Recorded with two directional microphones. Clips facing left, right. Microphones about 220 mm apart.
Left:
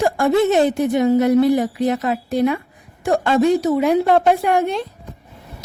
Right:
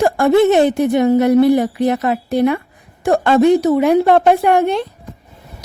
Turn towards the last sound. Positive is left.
turn(degrees=-65)  # may be behind; listen again after turning